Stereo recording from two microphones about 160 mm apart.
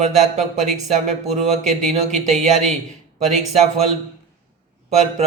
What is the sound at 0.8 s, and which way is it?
Speech, 45° right (ahead or behind).